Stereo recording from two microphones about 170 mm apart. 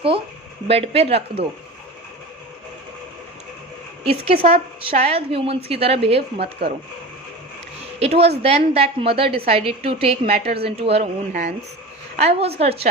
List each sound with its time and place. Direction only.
0.7 s a woman's voice: 35° right (ahead or behind)
4.0 s a woman's voice: 35° right (ahead or behind)
6.4 s speech: 70° right (ahead or behind)
7.9 s a woman's voice: 35° right (ahead or behind)
11.3 s speech: 60° right (ahead or behind)
12.1 s a woman's voice: 40° right (ahead or behind)